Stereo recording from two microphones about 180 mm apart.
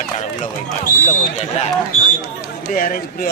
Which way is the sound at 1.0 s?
40° left (ahead or behind).